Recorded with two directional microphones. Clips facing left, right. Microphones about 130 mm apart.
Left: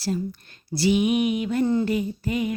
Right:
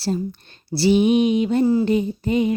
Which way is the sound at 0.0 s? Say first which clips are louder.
Right 3 dB; 30° right (ahead or behind).